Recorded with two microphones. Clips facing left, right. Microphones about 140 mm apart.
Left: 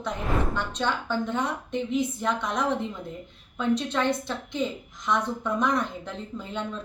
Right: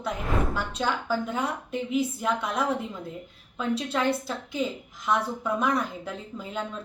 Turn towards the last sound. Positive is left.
turn(degrees=-5)  # may be behind; listen again after turning